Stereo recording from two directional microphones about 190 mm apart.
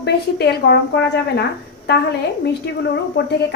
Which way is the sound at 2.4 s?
60° left (ahead or behind).